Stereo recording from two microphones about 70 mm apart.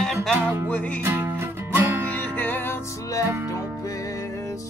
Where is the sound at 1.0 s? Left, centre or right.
Right.